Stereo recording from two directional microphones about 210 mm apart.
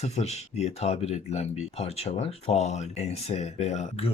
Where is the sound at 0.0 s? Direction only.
30° left (ahead or behind).